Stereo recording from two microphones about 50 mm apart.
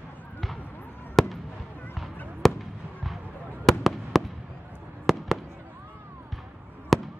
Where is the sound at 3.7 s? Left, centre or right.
Centre.